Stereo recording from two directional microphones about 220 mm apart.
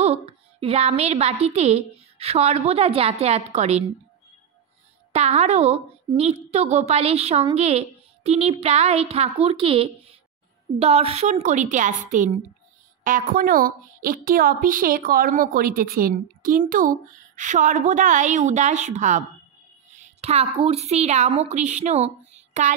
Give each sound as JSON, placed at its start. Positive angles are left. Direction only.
{"t": 0.0, "sound": "a woman's voice", "side_deg": -25}
{"t": 5.1, "sound": "a woman's voice", "side_deg": -30}